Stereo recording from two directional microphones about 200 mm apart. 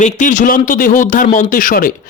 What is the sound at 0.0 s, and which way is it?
Speech, 40° left (ahead or behind).